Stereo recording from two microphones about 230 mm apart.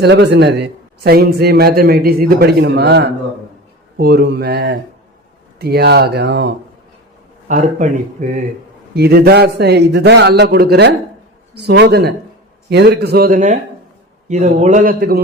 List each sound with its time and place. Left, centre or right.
0.0 s a man's voice: right
7.4 s a man's voice: right
9.0 s a man's voice: right